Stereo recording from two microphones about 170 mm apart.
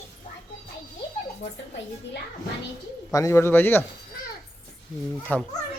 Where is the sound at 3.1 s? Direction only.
15° left (ahead or behind).